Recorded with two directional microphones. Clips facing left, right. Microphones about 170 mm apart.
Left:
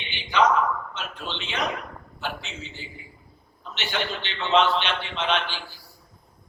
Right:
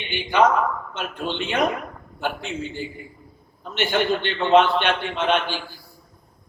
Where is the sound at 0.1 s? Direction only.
50° right (ahead or behind).